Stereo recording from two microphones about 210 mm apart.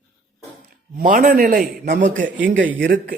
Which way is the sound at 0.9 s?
40° right (ahead or behind).